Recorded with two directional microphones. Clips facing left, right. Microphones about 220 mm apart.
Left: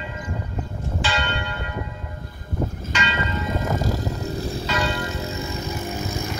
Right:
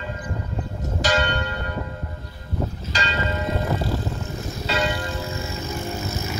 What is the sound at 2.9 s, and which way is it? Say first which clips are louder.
Church bell: left 1 dB; 35° right (ahead or behind).